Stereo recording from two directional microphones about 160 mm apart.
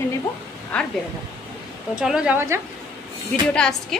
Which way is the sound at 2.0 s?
5° right (ahead or behind).